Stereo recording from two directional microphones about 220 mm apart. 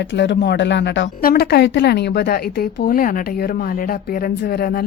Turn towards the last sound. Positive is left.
turn(degrees=45)  # may be behind; listen again after turning